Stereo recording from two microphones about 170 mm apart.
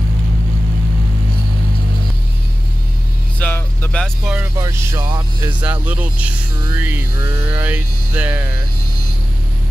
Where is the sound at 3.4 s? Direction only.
10° left (ahead or behind).